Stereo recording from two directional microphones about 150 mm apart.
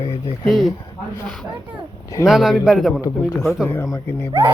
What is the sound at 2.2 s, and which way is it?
Speech, centre (ahead or behind).